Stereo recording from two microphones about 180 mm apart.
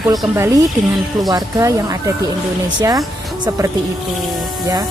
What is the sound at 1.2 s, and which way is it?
Speech, 20° right (ahead or behind).